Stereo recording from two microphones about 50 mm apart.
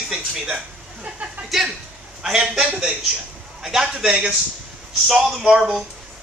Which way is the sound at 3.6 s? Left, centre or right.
Centre.